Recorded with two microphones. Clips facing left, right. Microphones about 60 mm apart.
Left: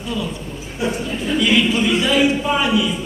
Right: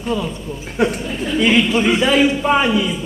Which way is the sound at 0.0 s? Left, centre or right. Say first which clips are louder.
Right 4 dB; right.